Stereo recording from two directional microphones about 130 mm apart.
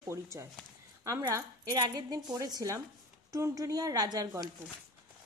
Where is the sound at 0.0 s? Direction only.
20° right (ahead or behind).